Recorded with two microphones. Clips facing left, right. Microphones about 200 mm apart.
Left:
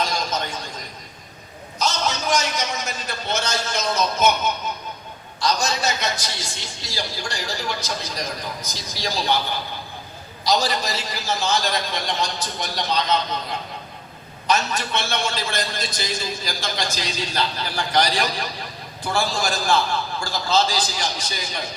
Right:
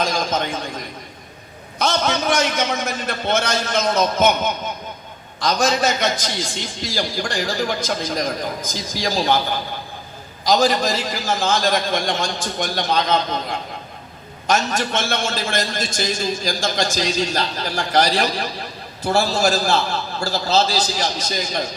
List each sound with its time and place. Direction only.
0.0 s a sound: 50° right (ahead or behind)
1.8 s a man's voice: 60° right (ahead or behind)
10.4 s a man's voice: 50° right (ahead or behind)